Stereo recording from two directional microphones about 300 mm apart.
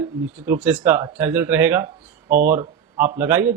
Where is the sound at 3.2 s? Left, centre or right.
Centre.